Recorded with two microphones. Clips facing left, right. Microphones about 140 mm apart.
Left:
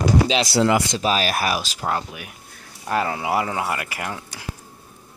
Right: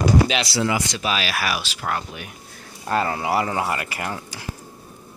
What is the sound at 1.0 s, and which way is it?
Speech, 40° left (ahead or behind).